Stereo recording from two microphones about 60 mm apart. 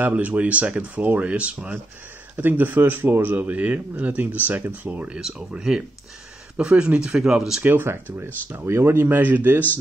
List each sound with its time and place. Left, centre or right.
0.0 s speech: right
2.3 s a man's voice: right
5.1 s speech: centre
7.2 s speech: centre
7.6 s speech: right
9.0 s a man's voice: right